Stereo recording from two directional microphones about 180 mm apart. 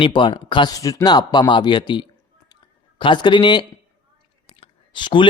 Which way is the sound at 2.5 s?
30° left (ahead or behind).